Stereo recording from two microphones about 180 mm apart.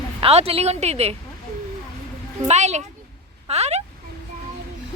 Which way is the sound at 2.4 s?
40° right (ahead or behind).